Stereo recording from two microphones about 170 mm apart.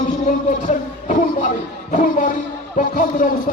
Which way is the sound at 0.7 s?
50° left (ahead or behind).